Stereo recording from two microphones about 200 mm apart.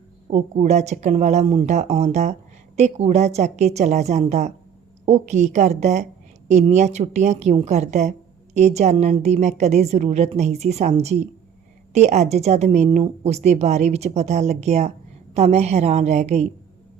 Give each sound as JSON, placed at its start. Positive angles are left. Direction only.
{"t": 0.3, "sound": "speech", "side_deg": -35}